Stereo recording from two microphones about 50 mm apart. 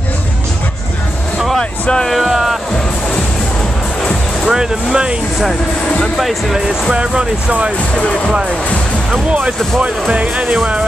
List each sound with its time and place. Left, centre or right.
1.6 s a sound: centre
2.0 s speech: centre
4.5 s speech: centre
6.1 s speech: centre
6.9 s speech: centre
9.8 s speech: right